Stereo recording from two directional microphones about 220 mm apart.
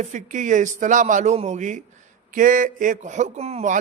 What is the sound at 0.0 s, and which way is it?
A man's voice, 35° right (ahead or behind).